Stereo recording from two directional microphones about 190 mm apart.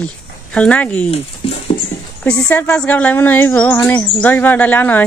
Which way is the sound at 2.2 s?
5° left (ahead or behind).